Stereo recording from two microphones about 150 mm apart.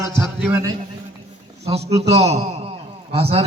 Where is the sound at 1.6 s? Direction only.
45° right (ahead or behind).